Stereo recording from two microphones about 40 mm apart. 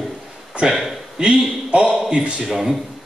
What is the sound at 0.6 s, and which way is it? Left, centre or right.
Speech, centre.